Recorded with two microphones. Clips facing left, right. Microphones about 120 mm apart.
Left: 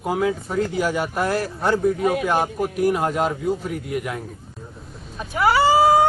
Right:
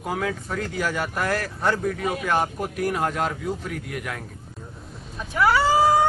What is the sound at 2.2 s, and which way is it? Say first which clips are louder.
Speech: left 3 dB; 15° left (ahead or behind).